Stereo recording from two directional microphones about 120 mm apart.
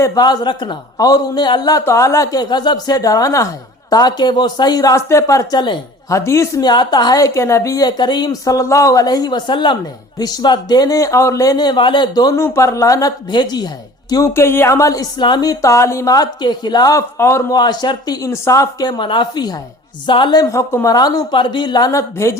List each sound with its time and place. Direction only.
0.0 s speech: 30° left (ahead or behind)
1.8 s speech: 25° left (ahead or behind); by 5.8 s 40° left (ahead or behind)
6.1 s speech: 25° left (ahead or behind)
12.4 s a woman's voice: 25° left (ahead or behind)
14.1 s a woman's voice: 25° left (ahead or behind)
17.6 s speech: 35° left (ahead or behind)